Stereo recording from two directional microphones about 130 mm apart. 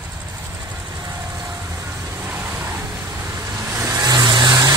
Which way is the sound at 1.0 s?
25° right (ahead or behind).